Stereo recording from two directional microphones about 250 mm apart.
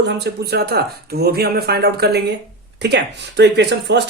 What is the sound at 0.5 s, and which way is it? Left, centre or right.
Speech, right.